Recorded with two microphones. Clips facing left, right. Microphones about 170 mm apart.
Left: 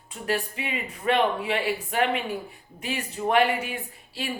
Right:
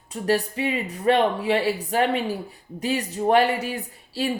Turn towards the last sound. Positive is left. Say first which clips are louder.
# right 7 dB
turn(degrees=-35)  # may be behind; listen again after turning